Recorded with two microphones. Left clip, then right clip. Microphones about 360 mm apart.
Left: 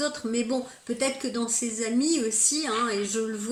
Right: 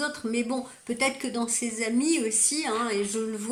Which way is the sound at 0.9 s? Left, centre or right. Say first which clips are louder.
Right 1 dB; right.